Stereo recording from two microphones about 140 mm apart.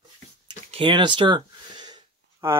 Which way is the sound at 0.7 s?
35° right (ahead or behind).